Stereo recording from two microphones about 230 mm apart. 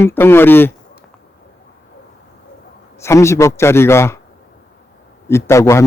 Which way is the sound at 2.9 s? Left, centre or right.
Centre.